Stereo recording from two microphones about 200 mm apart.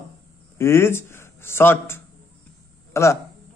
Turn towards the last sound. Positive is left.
turn(degrees=15)  # may be behind; listen again after turning